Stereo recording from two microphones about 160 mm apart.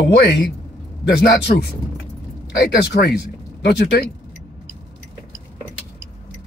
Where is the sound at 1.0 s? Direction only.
90° left.